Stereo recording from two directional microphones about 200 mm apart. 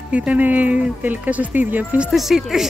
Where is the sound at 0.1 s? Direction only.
5° right (ahead or behind).